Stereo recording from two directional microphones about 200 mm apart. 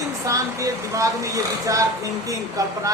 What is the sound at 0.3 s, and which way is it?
A woman's voice, 15° right (ahead or behind).